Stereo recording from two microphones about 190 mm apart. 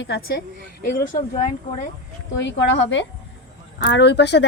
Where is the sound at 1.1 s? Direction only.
40° left (ahead or behind).